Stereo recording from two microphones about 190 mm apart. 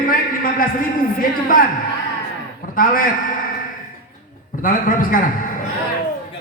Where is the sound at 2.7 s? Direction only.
45° left (ahead or behind).